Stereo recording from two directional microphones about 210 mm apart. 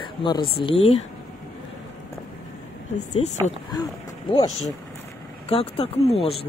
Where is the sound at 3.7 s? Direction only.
20° left (ahead or behind).